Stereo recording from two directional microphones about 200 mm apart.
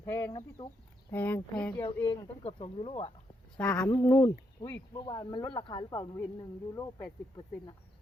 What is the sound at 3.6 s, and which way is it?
Speech, 5° left (ahead or behind).